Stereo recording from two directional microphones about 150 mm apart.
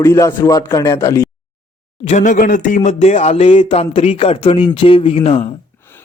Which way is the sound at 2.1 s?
60° left (ahead or behind).